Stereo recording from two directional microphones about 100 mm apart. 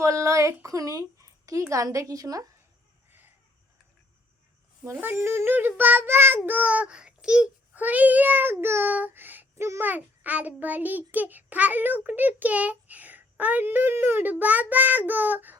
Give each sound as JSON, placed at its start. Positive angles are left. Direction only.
{"t": 0.0, "sound": "speech", "side_deg": -30}
{"t": 3.1, "sound": "a sound", "side_deg": -20}
{"t": 4.8, "sound": "child singing", "side_deg": -20}
{"t": 9.9, "sound": "a child's voice", "side_deg": -15}